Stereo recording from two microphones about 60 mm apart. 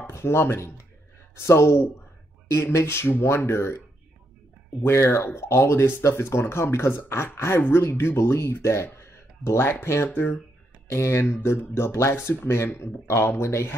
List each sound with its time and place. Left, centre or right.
0.1 s speech: left
4.8 s speech: left
9.7 s speech: left